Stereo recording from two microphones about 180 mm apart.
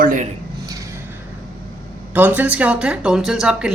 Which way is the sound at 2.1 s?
10° right (ahead or behind).